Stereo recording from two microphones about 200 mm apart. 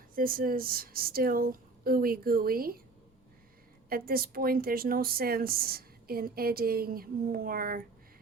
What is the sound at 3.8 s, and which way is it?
A woman's voice, 45° right (ahead or behind).